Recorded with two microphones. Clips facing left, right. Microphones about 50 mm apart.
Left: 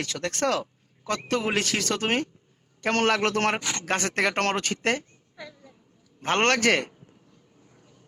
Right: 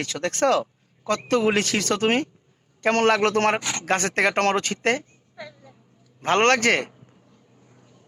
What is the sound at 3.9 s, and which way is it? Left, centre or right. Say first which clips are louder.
Speech: right 4 dB; centre.